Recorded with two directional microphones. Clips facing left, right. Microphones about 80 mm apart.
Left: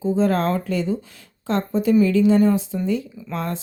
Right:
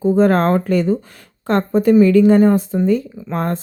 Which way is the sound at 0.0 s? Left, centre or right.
Right.